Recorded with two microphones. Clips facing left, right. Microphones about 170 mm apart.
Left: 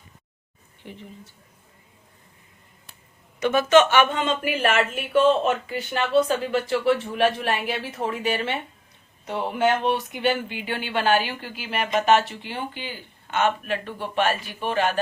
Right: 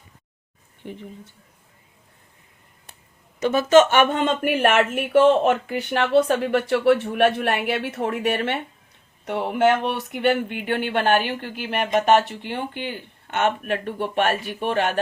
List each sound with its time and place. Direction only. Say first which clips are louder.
3.4 s speech: right 2 dB; 40° right (ahead or behind)
4.9 s speech: right 3 dB; 70° right (ahead or behind)